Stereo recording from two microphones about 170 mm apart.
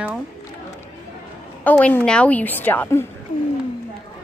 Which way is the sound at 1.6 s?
10° left (ahead or behind).